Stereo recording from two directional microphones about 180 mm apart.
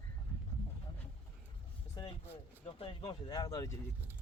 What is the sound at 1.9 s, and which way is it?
Speech, 25° left (ahead or behind).